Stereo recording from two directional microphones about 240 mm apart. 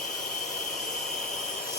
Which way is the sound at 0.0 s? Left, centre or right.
Left.